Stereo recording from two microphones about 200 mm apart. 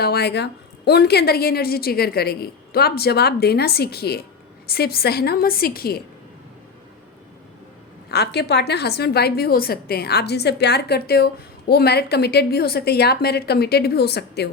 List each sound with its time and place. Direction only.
0.0 s a woman's voice: 55° left (ahead or behind)
8.1 s a woman's voice: 55° left (ahead or behind)